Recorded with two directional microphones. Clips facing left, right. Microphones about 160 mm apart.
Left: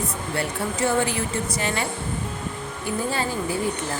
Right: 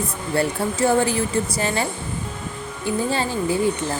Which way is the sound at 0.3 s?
35° right (ahead or behind).